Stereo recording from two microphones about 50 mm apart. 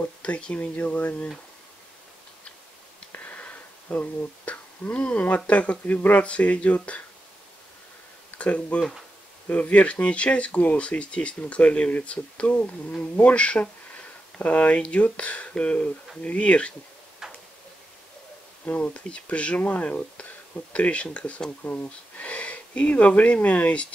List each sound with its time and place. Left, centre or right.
0.2 s speech: left
3.1 s a sound: left
5.3 s speech: left
8.4 s speech: left
17.2 s tick-tock: centre
18.7 s speech: left